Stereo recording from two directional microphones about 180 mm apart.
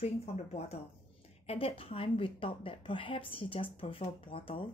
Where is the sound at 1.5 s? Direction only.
30° left (ahead or behind).